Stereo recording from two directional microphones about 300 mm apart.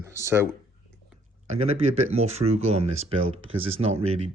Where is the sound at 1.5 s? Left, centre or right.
Right.